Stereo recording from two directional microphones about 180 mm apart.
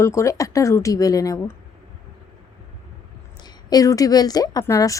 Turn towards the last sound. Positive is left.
turn(degrees=15)  # may be behind; listen again after turning